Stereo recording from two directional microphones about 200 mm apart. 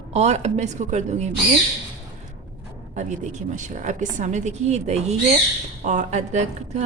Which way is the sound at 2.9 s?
35° right (ahead or behind).